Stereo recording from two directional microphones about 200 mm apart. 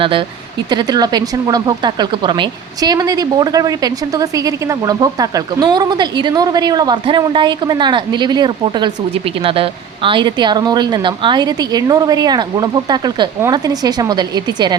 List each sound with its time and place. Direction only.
0.0 s speech: 25° right (ahead or behind)